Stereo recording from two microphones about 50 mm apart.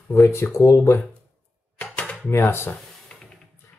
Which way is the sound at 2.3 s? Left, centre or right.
Left.